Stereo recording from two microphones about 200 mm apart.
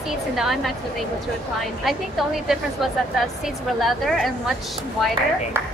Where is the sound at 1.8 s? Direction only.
Centre (ahead or behind).